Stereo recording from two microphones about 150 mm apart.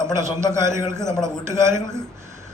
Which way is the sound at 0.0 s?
20° right (ahead or behind).